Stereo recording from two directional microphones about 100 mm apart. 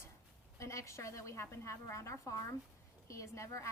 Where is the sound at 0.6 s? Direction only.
30° left (ahead or behind).